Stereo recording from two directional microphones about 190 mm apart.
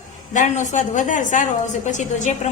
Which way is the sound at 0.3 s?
40° left (ahead or behind).